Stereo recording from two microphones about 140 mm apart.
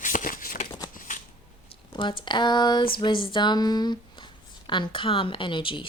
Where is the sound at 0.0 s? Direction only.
70° left (ahead or behind).